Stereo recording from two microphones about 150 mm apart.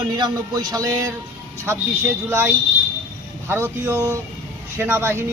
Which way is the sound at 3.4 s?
15° right (ahead or behind).